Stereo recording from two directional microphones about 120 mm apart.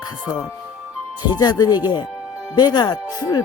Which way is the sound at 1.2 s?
35° left (ahead or behind).